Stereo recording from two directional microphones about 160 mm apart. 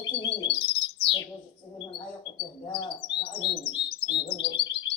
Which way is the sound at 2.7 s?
30° left (ahead or behind).